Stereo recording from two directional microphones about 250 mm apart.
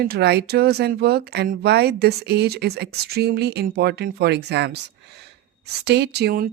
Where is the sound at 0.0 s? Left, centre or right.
Right.